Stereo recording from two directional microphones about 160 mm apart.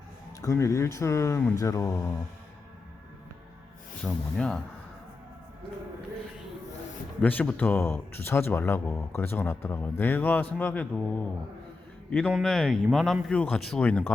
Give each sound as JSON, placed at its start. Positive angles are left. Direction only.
{"t": 0.4, "sound": "a man's voice", "side_deg": 20}
{"t": 4.0, "sound": "speech", "side_deg": 5}
{"t": 7.2, "sound": "a man's voice", "side_deg": 10}